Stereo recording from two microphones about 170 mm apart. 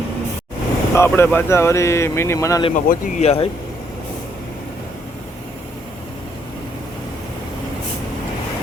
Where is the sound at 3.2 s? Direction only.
35° left (ahead or behind).